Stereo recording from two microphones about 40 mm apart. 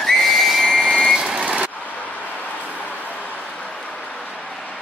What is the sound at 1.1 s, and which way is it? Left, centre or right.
Vehicle, centre.